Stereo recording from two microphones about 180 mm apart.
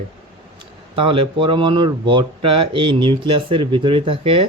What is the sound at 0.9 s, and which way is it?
Speech, 30° right (ahead or behind).